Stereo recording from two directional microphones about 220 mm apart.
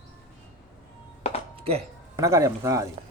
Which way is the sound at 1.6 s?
25° right (ahead or behind).